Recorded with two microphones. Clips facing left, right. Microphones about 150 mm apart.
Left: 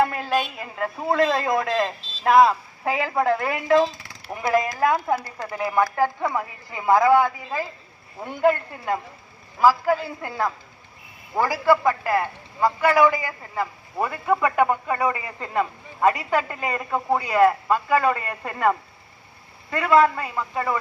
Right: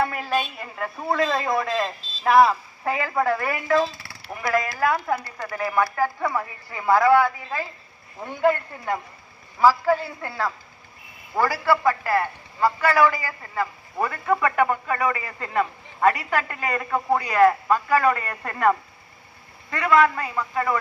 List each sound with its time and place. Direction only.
0.1 s a woman's voice: centre (ahead or behind)
0.9 s a man's voice: 10° left (ahead or behind)
1.4 s a woman's voice: centre (ahead or behind)
3.1 s a man's voice: 15° left (ahead or behind)
20.1 s a man's voice: 15° left (ahead or behind)